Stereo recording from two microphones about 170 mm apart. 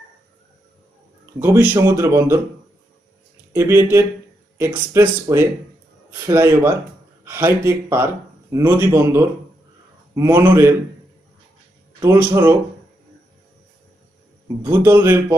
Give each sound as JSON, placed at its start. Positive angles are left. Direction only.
{"t": 1.4, "sound": "speech", "side_deg": -15}
{"t": 3.5, "sound": "speech", "side_deg": -15}
{"t": 12.0, "sound": "speech", "side_deg": -15}
{"t": 14.6, "sound": "speech", "side_deg": -15}